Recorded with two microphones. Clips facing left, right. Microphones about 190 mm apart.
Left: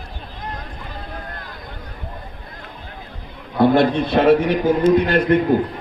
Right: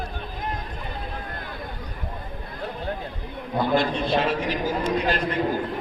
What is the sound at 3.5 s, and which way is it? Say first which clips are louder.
A man's voice: left 8 dB; 60° left (ahead or behind).